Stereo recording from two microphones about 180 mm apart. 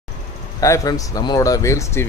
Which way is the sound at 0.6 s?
20° left (ahead or behind).